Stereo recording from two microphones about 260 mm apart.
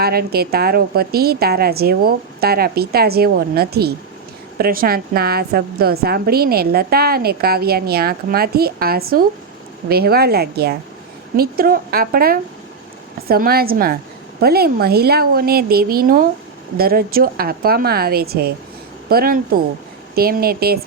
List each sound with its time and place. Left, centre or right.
0.0 s a woman's voice: right